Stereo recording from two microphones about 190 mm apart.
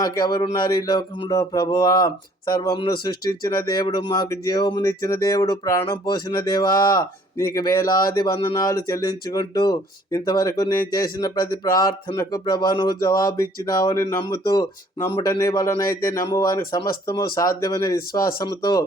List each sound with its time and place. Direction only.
0.0 s speech: 20° left (ahead or behind)